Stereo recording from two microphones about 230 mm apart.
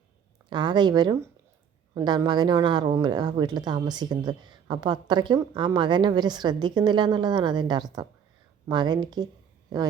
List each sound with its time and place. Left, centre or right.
0.5 s speech: centre